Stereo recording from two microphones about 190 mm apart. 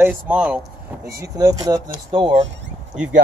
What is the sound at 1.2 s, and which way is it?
Speech, 20° right (ahead or behind).